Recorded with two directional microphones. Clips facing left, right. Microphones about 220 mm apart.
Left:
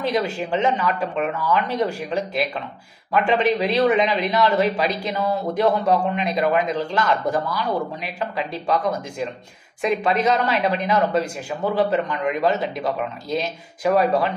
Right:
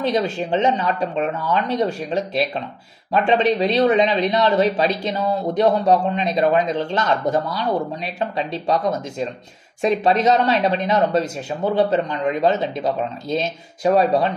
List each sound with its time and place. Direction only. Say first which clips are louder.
0.1 s speech: right 2 dB; 20° right (ahead or behind)